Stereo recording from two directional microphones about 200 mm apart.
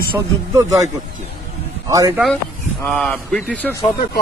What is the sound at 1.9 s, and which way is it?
Speech, 15° right (ahead or behind).